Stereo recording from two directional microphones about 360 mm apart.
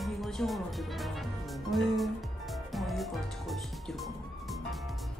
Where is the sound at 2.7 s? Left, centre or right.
Centre.